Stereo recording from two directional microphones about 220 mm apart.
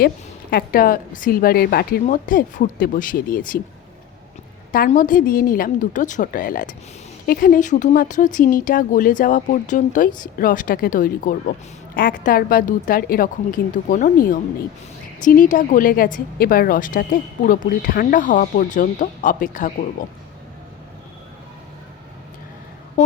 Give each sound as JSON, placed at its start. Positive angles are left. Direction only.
{"t": 0.5, "sound": "a woman's voice", "side_deg": 40}
{"t": 4.7, "sound": "a woman's voice", "side_deg": 40}